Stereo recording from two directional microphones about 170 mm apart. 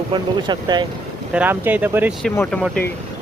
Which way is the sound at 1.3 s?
10° right (ahead or behind).